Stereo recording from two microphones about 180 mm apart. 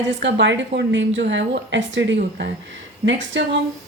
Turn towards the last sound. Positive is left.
turn(degrees=-85)